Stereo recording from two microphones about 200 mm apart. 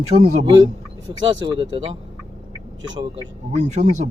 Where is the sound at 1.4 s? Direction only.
25° right (ahead or behind).